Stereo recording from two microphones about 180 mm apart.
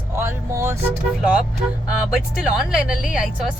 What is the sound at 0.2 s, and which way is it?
Vehicle, 15° right (ahead or behind).